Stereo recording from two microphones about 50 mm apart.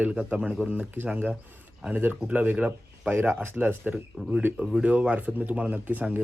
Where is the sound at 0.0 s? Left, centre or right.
Right.